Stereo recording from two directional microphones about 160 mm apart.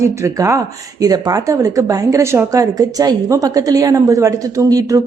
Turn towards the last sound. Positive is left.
turn(degrees=-20)  # may be behind; listen again after turning